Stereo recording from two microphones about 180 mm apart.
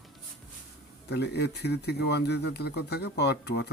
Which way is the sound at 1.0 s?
65° left (ahead or behind).